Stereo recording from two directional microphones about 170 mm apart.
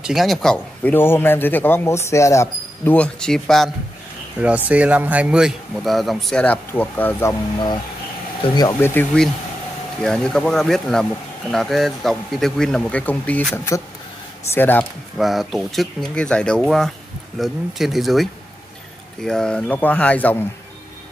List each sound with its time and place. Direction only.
0.0 s a man's voice: centre (ahead or behind); by 8.9 s 25° left (ahead or behind)
8.9 s a man's voice: 5° left (ahead or behind)
15.1 s a man's voice: centre (ahead or behind)